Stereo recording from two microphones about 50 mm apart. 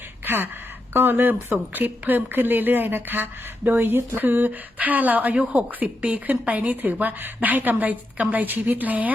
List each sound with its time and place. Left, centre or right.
0.3 s a woman's voice: right